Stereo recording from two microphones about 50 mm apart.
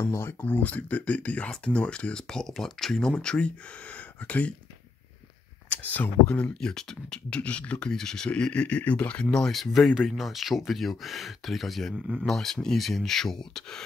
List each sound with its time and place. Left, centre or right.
0.0 s speech: left
5.7 s speech: left; by 7.2 s centre
7.2 s speech: left
7.8 s speech: centre
9.5 s speech: centre